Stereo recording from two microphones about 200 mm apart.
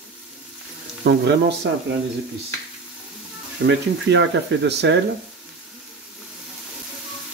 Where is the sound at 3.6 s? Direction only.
65° right (ahead or behind).